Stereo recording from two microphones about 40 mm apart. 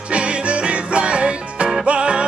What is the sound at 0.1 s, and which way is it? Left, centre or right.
Music, right.